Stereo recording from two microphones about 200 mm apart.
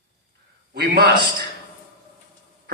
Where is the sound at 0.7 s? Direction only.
50° right (ahead or behind).